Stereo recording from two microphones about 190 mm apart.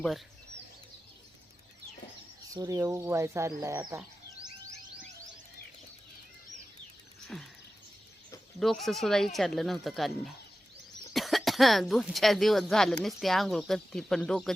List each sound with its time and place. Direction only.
2.5 s speech: 20° right (ahead or behind)
7.3 s speech: centre (ahead or behind)
8.5 s speech: centre (ahead or behind)